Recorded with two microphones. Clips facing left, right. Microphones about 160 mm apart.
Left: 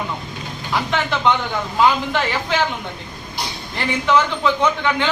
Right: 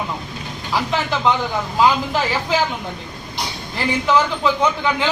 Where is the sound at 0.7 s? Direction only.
5° right (ahead or behind).